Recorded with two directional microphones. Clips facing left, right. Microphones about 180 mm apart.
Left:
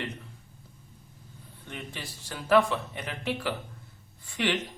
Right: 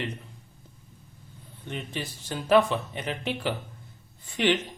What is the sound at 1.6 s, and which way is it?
A man's voice, 20° right (ahead or behind).